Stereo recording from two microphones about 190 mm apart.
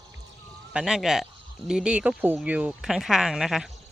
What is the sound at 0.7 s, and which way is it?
Speech, 5° right (ahead or behind).